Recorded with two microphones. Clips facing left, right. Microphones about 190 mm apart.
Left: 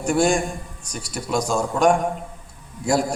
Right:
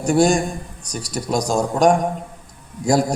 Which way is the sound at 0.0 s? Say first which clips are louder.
Right 3 dB; 40° right (ahead or behind).